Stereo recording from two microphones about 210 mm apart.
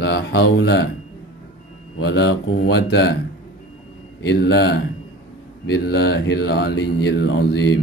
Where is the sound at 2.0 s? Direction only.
60° left (ahead or behind).